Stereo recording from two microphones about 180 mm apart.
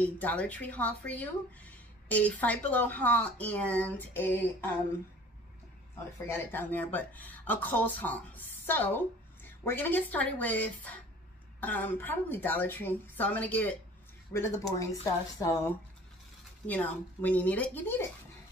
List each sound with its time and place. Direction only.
0.0 s speech: 10° left (ahead or behind)
6.2 s speech: 10° left (ahead or behind)
16.6 s speech: 10° left (ahead or behind)